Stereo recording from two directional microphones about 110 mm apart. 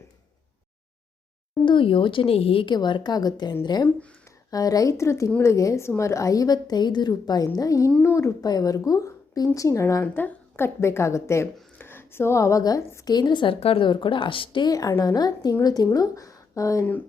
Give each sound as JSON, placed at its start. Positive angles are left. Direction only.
{"t": 1.6, "sound": "speech", "side_deg": 50}
{"t": 2.7, "sound": "a woman's voice", "side_deg": 40}
{"t": 13.1, "sound": "speech", "side_deg": 40}
{"t": 13.6, "sound": "speech", "side_deg": 60}
{"t": 14.7, "sound": "a woman's voice", "side_deg": 35}